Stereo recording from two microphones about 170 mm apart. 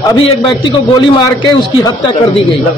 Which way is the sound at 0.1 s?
25° left (ahead or behind).